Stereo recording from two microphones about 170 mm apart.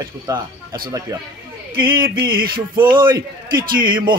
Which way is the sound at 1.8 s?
60° right (ahead or behind).